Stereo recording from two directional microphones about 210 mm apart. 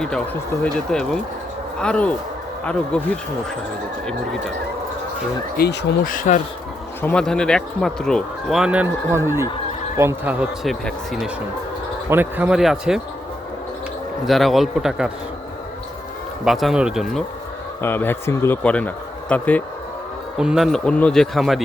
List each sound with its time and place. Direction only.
0.6 s speech: 5° left (ahead or behind)
5.5 s speech: 45° left (ahead or behind)
7.0 s a man's voice: 5° left (ahead or behind); by 10.3 s 10° right (ahead or behind)
10.6 s speech: centre (ahead or behind)
14.3 s speech: centre (ahead or behind)
16.4 s speech: centre (ahead or behind)
17.8 s speech: 10° left (ahead or behind)